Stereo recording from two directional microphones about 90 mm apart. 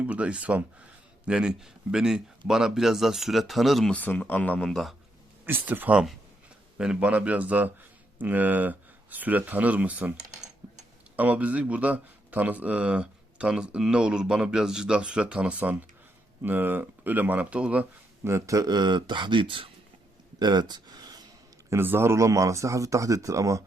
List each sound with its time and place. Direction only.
0.0 s speech: 15° right (ahead or behind)
3.9 s speech: 20° left (ahead or behind)
4.6 s speech: 5° left (ahead or behind)
5.5 s speech: 25° right (ahead or behind)
10.6 s a sound: 20° right (ahead or behind)
11.2 s speech: 15° right (ahead or behind)
18.3 s speech: 35° right (ahead or behind); by 19.7 s 70° right (ahead or behind)
20.4 s a sound: 50° right (ahead or behind)
21.7 s speech: 25° right (ahead or behind)